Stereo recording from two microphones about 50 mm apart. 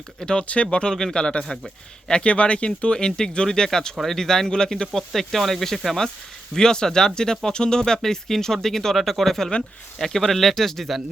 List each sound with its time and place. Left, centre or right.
0.2 s speech: centre
6.5 s speech: centre